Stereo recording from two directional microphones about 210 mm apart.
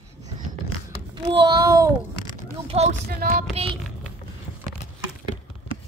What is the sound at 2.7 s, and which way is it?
Speech, 30° right (ahead or behind).